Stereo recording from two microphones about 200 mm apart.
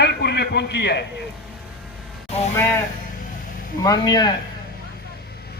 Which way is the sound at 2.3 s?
30° left (ahead or behind).